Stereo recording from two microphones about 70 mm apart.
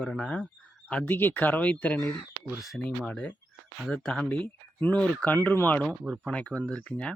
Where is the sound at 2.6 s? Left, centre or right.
Centre.